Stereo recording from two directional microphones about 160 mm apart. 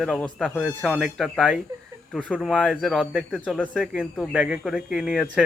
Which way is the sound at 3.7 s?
5° right (ahead or behind).